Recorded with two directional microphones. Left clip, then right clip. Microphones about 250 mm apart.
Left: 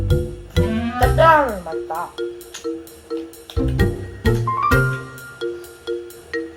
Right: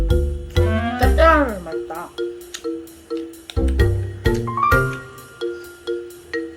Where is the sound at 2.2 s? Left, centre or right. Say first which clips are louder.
Right 1 dB; centre.